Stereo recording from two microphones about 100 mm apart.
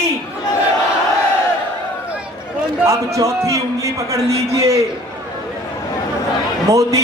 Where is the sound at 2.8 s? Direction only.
30° right (ahead or behind).